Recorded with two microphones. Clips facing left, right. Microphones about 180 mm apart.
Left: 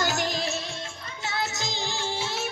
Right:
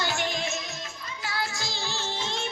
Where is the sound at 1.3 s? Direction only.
20° left (ahead or behind).